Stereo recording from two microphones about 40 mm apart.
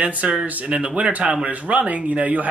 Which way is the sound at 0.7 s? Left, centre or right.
Right.